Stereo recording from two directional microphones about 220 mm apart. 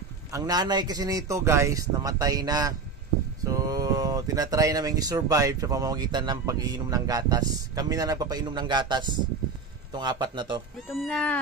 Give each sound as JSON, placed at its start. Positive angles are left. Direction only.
{"t": 0.3, "sound": "a man's voice", "side_deg": -15}
{"t": 10.9, "sound": "cat", "side_deg": 0}